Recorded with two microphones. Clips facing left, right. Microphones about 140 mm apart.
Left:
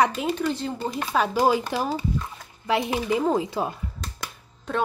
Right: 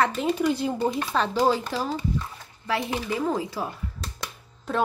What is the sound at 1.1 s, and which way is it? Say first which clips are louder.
A woman's voice: left 4 dB; 10° left (ahead or behind).